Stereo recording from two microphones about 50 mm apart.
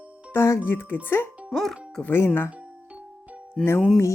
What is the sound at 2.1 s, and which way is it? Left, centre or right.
Speech, left.